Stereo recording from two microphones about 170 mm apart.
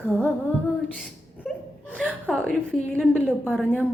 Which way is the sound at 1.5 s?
Centre (ahead or behind).